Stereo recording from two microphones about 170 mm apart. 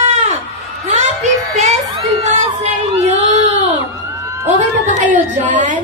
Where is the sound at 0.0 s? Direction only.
40° right (ahead or behind).